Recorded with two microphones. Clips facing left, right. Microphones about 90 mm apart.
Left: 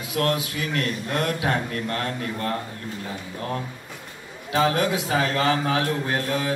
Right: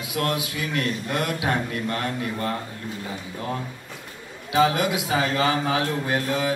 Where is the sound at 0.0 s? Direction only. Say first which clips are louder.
Left 2 dB; 15° right (ahead or behind).